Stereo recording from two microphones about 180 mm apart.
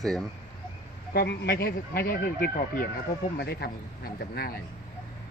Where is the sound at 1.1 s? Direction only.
60° left (ahead or behind).